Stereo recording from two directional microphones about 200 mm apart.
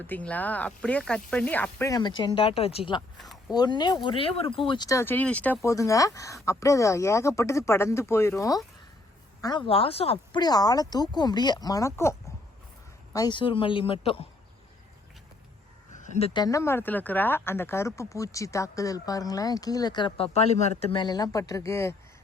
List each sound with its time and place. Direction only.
0.0 s speech: 10° left (ahead or behind)
13.1 s speech: 20° left (ahead or behind)
16.0 s speech: 30° left (ahead or behind); by 21.9 s 15° left (ahead or behind)